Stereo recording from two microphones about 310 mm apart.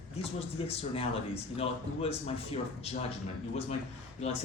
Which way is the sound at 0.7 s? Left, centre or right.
Centre.